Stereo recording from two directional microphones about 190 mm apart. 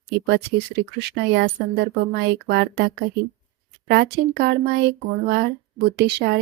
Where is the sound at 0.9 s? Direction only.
60° right (ahead or behind).